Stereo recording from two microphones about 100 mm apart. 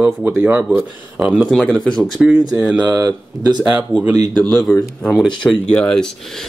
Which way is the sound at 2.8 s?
35° right (ahead or behind).